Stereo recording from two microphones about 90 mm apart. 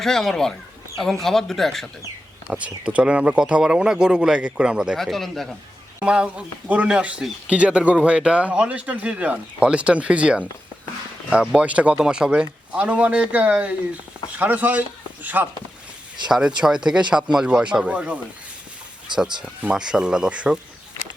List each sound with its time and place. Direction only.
0.0 s speech: 5° left (ahead or behind)
2.5 s speech: 15° right (ahead or behind)
4.9 s speech: 5° left (ahead or behind)
6.1 s speech: 15° right (ahead or behind)
16.6 s speech: 5° right (ahead or behind)
19.1 s speech: 55° right (ahead or behind)
19.7 s speech: 5° right (ahead or behind)